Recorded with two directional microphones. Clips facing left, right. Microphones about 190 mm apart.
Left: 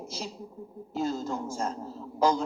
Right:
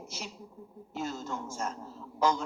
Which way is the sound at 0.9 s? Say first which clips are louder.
Left 6 dB; 35° left (ahead or behind).